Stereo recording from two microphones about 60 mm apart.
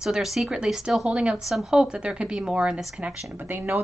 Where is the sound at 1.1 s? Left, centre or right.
Centre.